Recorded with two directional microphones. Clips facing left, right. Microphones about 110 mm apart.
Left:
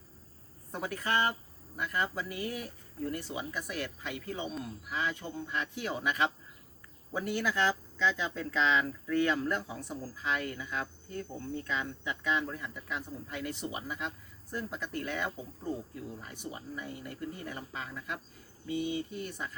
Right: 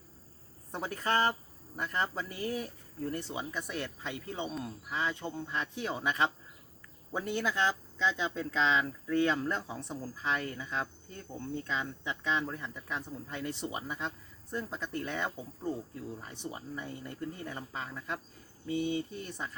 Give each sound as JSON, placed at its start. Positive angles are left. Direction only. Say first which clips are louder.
{"t": 0.7, "sound": "speech", "louder": "right 1 dB", "side_deg": -30}